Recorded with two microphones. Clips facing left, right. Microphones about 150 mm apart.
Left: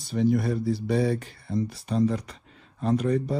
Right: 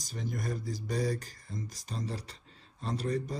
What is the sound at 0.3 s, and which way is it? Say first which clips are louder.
Speech: left 8 dB; 45° right (ahead or behind).